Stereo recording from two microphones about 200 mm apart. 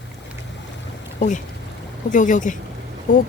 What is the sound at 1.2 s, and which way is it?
Speech, 40° left (ahead or behind).